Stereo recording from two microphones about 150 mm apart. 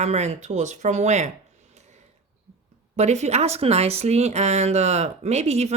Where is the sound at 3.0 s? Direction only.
50° right (ahead or behind).